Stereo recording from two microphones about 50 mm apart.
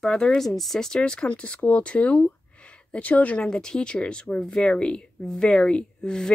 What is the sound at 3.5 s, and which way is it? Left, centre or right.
Speech, centre.